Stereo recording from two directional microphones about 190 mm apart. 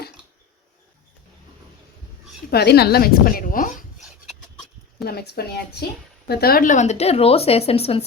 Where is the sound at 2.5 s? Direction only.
55° left (ahead or behind).